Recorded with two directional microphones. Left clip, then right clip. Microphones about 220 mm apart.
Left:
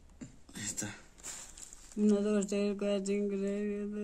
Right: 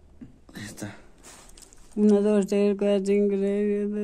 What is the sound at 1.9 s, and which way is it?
Mantra, 45° right (ahead or behind).